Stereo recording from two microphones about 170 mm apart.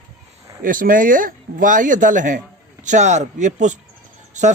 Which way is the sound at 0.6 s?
55° right (ahead or behind).